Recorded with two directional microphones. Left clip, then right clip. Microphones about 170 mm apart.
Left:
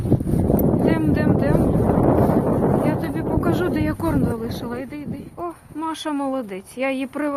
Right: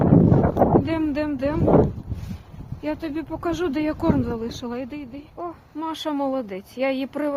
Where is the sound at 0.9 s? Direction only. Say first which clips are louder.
Left 4 dB; 20° right (ahead or behind).